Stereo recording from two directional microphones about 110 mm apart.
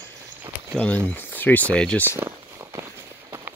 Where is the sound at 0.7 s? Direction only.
10° left (ahead or behind).